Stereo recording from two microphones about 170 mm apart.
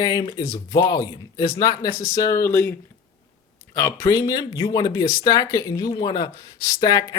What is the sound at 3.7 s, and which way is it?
Speech, 15° left (ahead or behind).